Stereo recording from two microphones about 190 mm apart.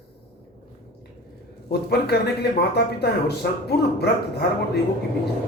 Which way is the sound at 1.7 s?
60° left (ahead or behind).